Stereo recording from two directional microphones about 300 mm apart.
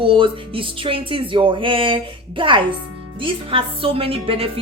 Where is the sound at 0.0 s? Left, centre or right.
Centre.